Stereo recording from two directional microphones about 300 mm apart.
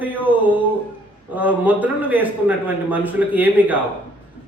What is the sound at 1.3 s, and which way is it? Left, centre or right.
Speech, centre.